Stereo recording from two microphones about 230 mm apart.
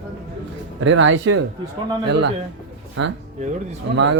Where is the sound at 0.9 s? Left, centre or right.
Right.